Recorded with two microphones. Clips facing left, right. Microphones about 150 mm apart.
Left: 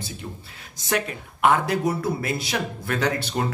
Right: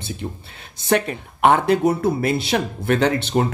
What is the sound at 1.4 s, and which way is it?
Speech, 25° right (ahead or behind).